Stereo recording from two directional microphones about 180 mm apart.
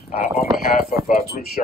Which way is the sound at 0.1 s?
50° left (ahead or behind).